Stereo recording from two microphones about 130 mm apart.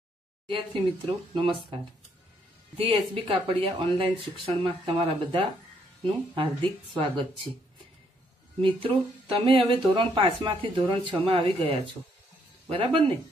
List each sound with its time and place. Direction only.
0.5 s speech: 45° right (ahead or behind)
3.2 s speech: 45° right (ahead or behind)
8.5 s speech: 45° right (ahead or behind)